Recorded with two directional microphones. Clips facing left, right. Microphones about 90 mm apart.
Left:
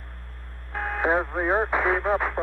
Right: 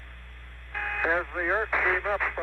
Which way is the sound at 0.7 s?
30° left (ahead or behind).